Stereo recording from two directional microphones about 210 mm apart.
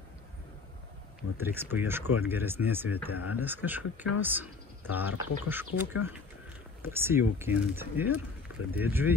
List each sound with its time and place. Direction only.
1.4 s speech: 10° right (ahead or behind)
3.1 s speech: 90° left
3.3 s speech: 10° right (ahead or behind)